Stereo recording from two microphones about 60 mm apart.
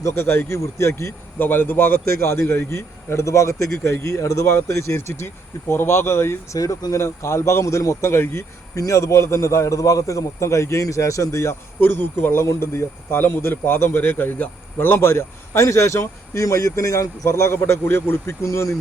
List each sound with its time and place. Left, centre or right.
0.2 s speech: left
1.4 s a man's voice: left
2.0 s speech: left
6.6 s a man's voice: left
8.7 s a man's voice: left
11.8 s speech: left
17.2 s speech: left